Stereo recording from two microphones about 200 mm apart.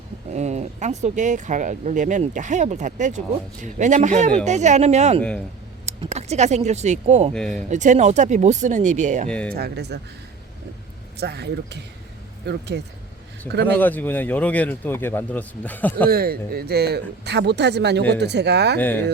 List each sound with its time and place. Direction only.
0.3 s speech: 35° right (ahead or behind)
7.3 s speech: 5° left (ahead or behind)
7.7 s speech: 35° right (ahead or behind)
9.3 s speech: 5° left (ahead or behind)
9.6 s speech: 55° right (ahead or behind)
11.2 s speech: 55° right (ahead or behind)
13.7 s speech: 10° left (ahead or behind)
16.0 s speech: 50° right (ahead or behind)
18.8 s speech: 10° left (ahead or behind)